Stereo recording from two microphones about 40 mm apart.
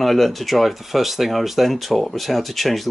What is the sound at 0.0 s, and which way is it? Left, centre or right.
Speech, centre.